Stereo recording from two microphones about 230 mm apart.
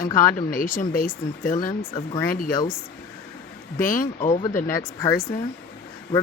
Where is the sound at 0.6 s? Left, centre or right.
Left.